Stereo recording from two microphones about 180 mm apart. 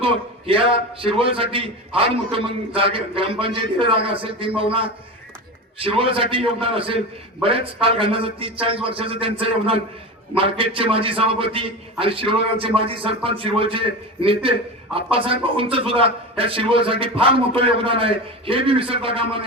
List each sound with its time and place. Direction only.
0.0 s a man's voice: 30° right (ahead or behind)